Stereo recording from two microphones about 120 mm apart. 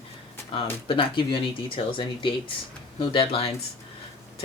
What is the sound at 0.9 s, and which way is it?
Speech, 50° left (ahead or behind).